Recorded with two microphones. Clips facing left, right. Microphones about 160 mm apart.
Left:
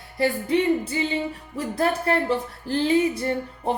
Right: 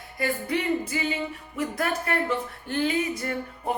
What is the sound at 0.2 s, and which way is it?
Music, 25° left (ahead or behind).